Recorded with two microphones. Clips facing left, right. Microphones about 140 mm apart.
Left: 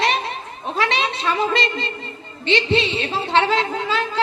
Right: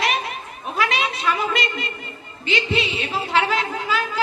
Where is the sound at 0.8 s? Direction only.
30° left (ahead or behind).